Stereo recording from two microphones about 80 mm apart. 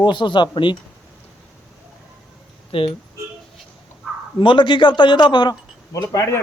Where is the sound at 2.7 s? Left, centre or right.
Left.